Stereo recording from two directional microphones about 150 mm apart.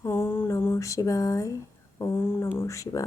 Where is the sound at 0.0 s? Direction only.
15° left (ahead or behind).